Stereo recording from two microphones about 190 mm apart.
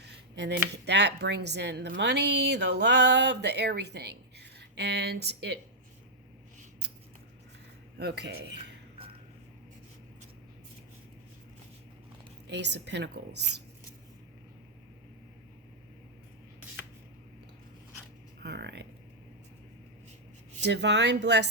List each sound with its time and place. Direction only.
0.0 s speech: 65° right (ahead or behind)
7.9 s speech: 60° right (ahead or behind)
12.5 s speech: 65° right (ahead or behind)
18.4 s speech: 60° right (ahead or behind)
20.7 s speech: 65° right (ahead or behind)